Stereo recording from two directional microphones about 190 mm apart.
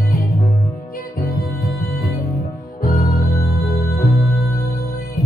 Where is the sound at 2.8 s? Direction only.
50° left (ahead or behind).